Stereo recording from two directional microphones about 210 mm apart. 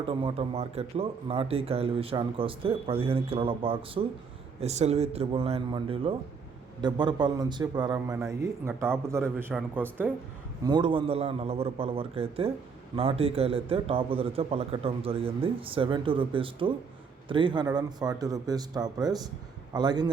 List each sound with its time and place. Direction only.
0.0 s a man's voice: 25° right (ahead or behind); by 10.1 s 10° right (ahead or behind)
10.6 s a man's voice: 20° right (ahead or behind)